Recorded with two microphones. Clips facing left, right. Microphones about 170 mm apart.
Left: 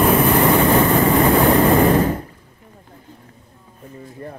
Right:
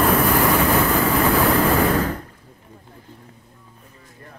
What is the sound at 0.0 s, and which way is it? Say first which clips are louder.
Vehicle: left 3 dB; 10° left (ahead or behind).